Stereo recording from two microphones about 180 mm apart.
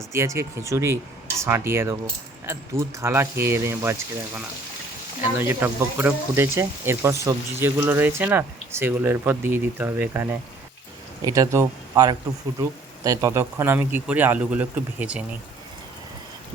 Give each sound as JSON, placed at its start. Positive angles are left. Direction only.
{"t": 0.1, "sound": "speech", "side_deg": -15}
{"t": 5.4, "sound": "speech", "side_deg": -15}